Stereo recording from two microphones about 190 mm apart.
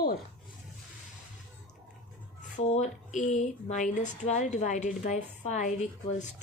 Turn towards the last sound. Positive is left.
turn(degrees=40)  # may be behind; listen again after turning